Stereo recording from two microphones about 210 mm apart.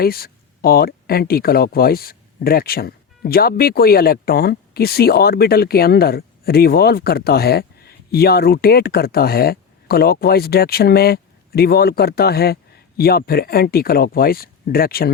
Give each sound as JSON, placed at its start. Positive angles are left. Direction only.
{"t": 0.0, "sound": "speech", "side_deg": 45}